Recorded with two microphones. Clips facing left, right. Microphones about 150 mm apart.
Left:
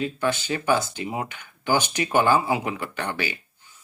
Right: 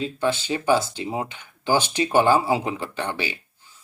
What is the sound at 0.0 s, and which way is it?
Speech, 25° right (ahead or behind).